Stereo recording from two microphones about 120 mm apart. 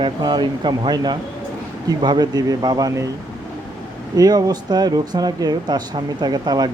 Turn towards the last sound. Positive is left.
turn(degrees=-35)  # may be behind; listen again after turning